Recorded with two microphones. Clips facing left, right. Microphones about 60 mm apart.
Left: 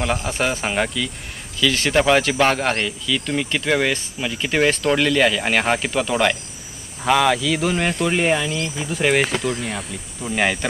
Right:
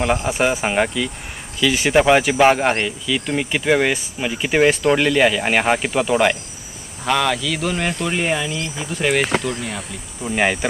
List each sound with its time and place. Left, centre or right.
0.0 s speech: centre
7.1 s speech: centre